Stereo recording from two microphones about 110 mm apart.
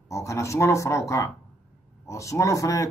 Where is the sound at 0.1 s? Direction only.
25° left (ahead or behind).